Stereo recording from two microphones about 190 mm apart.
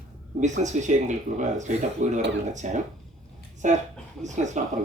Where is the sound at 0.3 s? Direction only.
40° right (ahead or behind).